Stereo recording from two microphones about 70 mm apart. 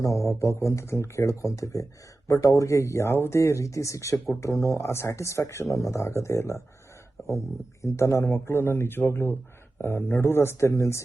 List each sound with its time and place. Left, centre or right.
0.0 s speech: left